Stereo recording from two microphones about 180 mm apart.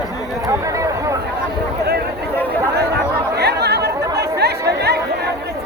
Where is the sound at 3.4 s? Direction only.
65° right (ahead or behind).